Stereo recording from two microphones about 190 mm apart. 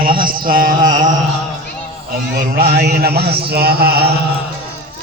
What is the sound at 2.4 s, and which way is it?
A man's voice, 50° right (ahead or behind).